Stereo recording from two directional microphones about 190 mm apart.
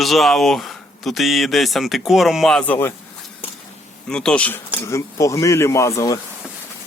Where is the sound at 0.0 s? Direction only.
Centre (ahead or behind).